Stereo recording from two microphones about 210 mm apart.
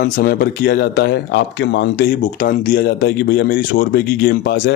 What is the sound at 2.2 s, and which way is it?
Speech, 40° left (ahead or behind).